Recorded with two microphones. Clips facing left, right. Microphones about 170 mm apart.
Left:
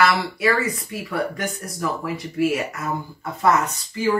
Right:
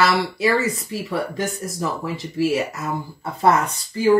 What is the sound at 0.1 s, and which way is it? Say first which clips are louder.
Speech: right 2 dB; 20° right (ahead or behind).